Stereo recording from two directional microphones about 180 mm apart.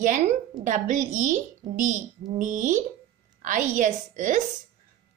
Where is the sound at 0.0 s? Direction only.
45° right (ahead or behind).